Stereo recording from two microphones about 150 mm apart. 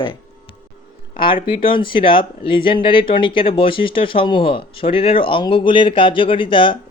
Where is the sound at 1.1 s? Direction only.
35° left (ahead or behind).